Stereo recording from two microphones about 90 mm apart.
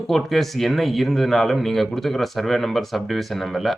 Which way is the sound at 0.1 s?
Centre (ahead or behind).